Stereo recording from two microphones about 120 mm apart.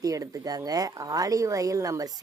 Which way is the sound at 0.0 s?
30° right (ahead or behind).